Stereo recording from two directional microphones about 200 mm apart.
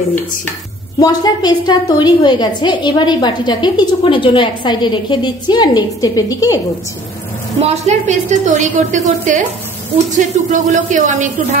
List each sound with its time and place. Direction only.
0.9 s a woman's voice: 20° left (ahead or behind)
7.6 s a woman's voice: 35° right (ahead or behind)